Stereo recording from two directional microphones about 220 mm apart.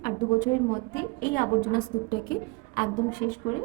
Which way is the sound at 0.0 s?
35° left (ahead or behind).